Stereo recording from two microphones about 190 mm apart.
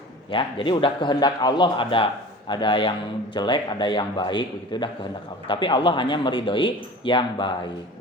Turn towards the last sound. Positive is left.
turn(degrees=25)  # may be behind; listen again after turning